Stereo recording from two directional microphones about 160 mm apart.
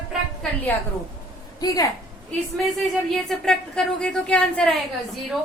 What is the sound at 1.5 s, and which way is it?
Speech, 20° left (ahead or behind).